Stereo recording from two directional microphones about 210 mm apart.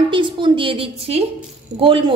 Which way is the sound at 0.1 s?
25° right (ahead or behind).